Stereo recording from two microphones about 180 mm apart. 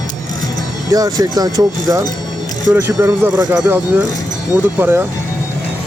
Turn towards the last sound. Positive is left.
turn(degrees=-10)  # may be behind; listen again after turning